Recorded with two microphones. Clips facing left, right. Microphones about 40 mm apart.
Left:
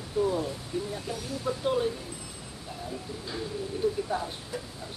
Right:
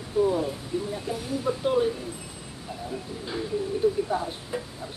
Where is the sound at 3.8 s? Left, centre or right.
Right.